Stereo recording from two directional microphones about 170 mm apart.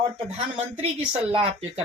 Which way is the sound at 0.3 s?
40° right (ahead or behind).